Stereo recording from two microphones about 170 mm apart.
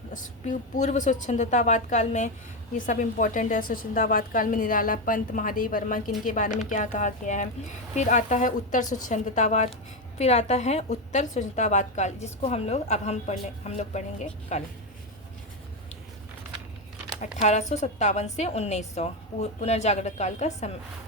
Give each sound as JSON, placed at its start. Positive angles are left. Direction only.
{"t": 0.1, "sound": "a woman's voice", "side_deg": 45}
{"t": 17.2, "sound": "a woman's voice", "side_deg": 45}